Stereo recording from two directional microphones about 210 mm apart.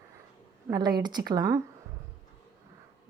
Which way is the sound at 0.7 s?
20° right (ahead or behind).